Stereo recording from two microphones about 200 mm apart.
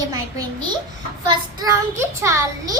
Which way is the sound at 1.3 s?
20° right (ahead or behind).